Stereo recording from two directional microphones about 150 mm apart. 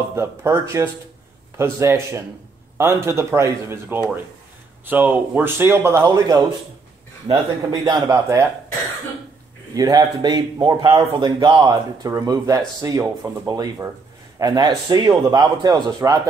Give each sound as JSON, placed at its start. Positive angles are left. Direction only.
{"t": 0.1, "sound": "a man's voice", "side_deg": -15}
{"t": 7.7, "sound": "a man's voice", "side_deg": -25}
{"t": 9.8, "sound": "a man's voice", "side_deg": -25}